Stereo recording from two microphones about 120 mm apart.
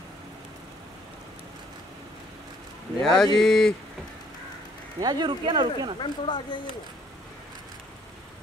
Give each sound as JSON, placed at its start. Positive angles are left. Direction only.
{"t": 3.0, "sound": "speech", "side_deg": 5}
{"t": 5.0, "sound": "speech", "side_deg": -40}
{"t": 5.9, "sound": "speech", "side_deg": 40}